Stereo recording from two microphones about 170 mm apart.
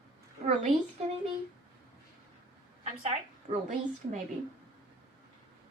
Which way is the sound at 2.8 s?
40° right (ahead or behind).